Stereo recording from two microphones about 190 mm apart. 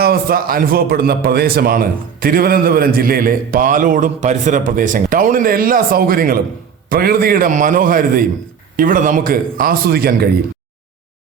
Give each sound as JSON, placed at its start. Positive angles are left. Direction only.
{"t": 0.0, "sound": "a man's voice", "side_deg": -55}